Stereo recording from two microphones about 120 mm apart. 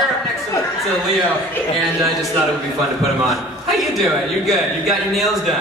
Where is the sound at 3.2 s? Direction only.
Centre (ahead or behind).